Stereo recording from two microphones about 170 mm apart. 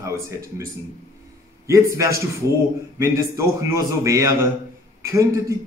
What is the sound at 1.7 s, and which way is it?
A man's voice, 20° right (ahead or behind).